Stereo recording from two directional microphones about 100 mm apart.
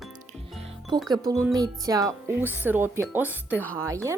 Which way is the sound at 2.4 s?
20° right (ahead or behind).